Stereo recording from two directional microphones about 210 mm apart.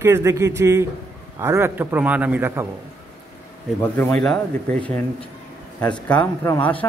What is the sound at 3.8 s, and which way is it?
Speech, 5° left (ahead or behind).